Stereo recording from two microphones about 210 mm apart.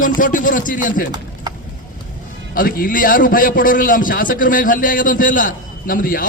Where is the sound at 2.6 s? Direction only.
40° left (ahead or behind).